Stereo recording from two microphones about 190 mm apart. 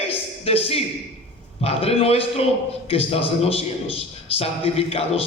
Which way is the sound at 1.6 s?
30° left (ahead or behind).